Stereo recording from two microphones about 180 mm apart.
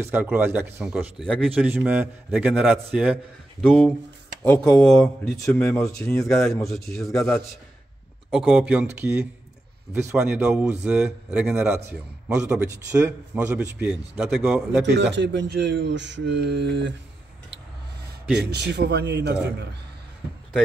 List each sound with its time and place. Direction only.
0.1 s a man's voice: 10° right (ahead or behind)
10.1 s a man's voice: 5° right (ahead or behind)
15.1 s speech: 75° right (ahead or behind)
18.4 s a man's voice: 70° right (ahead or behind)